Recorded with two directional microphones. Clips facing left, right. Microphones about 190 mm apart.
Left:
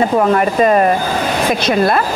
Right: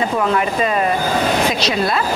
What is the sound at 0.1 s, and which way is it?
Speech, 45° left (ahead or behind).